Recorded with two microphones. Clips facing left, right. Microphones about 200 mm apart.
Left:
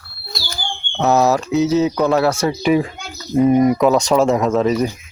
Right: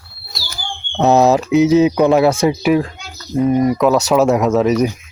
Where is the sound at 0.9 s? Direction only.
20° right (ahead or behind).